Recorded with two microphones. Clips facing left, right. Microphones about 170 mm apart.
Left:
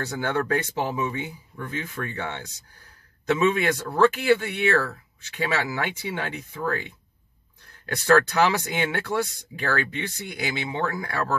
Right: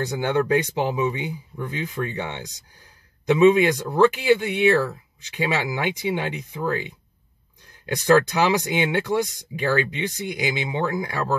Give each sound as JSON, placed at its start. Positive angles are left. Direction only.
{"t": 0.0, "sound": "speech", "side_deg": -15}